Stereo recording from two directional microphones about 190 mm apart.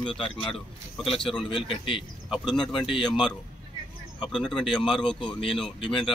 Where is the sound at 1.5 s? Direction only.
25° left (ahead or behind).